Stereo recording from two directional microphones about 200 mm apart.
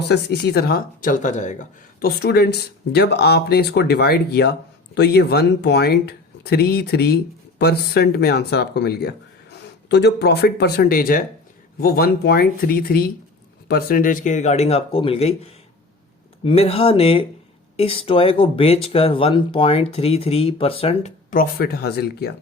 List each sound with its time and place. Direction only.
0.1 s speech: 55° left (ahead or behind); by 15.4 s 30° left (ahead or behind)
16.4 s speech: 30° left (ahead or behind)
21.2 s speech: 45° left (ahead or behind)